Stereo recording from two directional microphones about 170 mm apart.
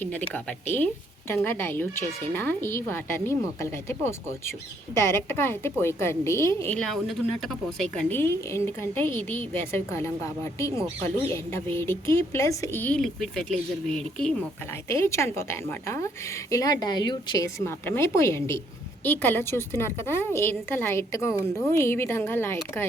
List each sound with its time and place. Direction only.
0.0 s a woman's voice: 10° left (ahead or behind)
14.8 s a woman's voice: 15° left (ahead or behind)